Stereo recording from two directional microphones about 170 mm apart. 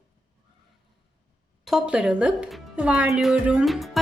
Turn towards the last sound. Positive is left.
turn(degrees=0)  # may be behind; listen again after turning